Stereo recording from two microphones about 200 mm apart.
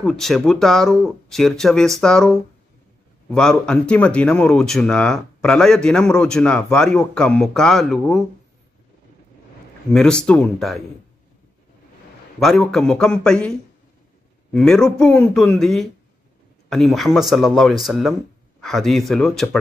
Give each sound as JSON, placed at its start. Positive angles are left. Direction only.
{"t": 0.0, "sound": "speech", "side_deg": 0}
{"t": 9.9, "sound": "speech", "side_deg": 5}
{"t": 12.4, "sound": "speech", "side_deg": 0}